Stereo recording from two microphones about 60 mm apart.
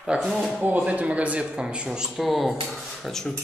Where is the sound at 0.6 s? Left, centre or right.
Right.